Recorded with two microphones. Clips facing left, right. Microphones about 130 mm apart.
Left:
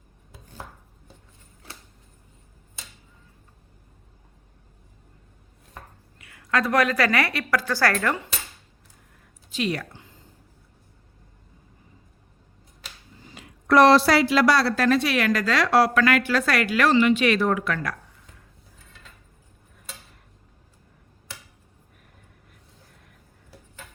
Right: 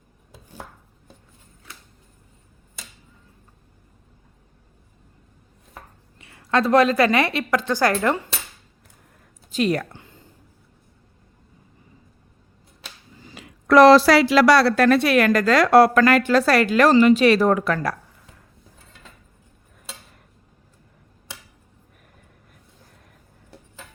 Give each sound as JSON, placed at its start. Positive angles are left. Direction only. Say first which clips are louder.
{"t": 6.1, "sound": "a woman's voice", "louder": "right 4 dB", "side_deg": -25}
{"t": 9.5, "sound": "a sound", "louder": "right 6 dB", "side_deg": -45}
{"t": 13.2, "sound": "a woman's voice", "louder": "right 3 dB", "side_deg": -90}